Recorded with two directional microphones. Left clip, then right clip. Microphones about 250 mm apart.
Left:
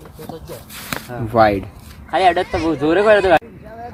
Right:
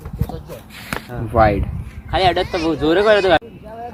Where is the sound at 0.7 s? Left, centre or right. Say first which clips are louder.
Left 1 dB; left.